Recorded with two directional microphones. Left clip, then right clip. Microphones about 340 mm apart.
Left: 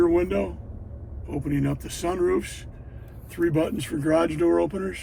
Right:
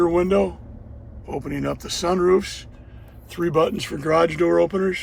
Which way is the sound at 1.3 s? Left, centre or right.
Centre.